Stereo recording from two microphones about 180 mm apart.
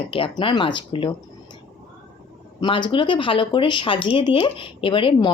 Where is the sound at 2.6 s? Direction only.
25° left (ahead or behind).